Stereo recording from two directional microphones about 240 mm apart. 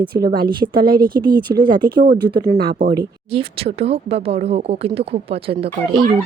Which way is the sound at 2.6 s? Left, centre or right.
Right.